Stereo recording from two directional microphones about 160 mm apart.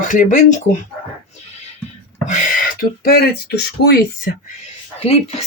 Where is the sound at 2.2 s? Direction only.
50° left (ahead or behind); by 3.9 s 85° left.